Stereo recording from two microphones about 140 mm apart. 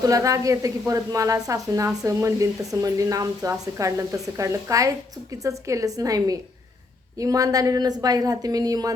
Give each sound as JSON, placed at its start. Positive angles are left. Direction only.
{"t": 0.0, "sound": "a woman's voice", "side_deg": -25}